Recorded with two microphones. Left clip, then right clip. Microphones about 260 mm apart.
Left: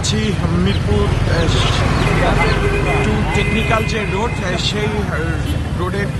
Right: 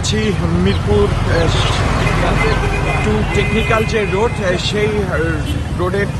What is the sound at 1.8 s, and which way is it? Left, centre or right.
Vehicle, right.